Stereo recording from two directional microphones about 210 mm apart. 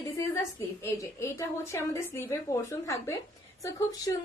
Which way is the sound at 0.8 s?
10° left (ahead or behind).